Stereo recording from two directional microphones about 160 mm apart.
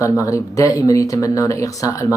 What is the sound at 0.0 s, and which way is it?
Speech, 20° left (ahead or behind).